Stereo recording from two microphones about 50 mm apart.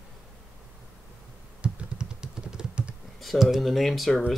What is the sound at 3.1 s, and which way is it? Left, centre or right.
Speech, centre.